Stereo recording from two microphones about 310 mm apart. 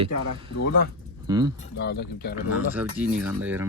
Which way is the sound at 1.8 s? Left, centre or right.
Left.